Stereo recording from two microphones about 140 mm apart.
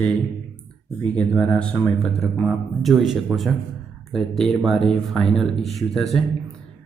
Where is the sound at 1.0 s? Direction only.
5° left (ahead or behind).